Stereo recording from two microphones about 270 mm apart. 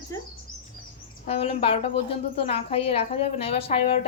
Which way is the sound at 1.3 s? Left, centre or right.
Left.